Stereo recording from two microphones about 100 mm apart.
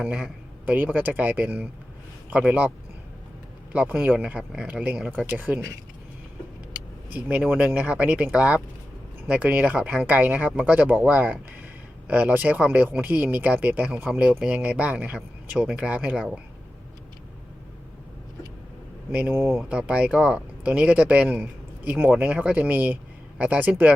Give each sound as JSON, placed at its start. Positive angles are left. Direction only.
{"t": 0.0, "sound": "speech", "side_deg": -10}
{"t": 7.1, "sound": "speech", "side_deg": -15}
{"t": 19.3, "sound": "speech", "side_deg": -25}
{"t": 19.6, "sound": "speech", "side_deg": -10}